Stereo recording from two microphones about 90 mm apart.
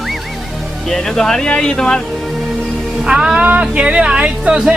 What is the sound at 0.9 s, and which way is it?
Speech, 5° left (ahead or behind).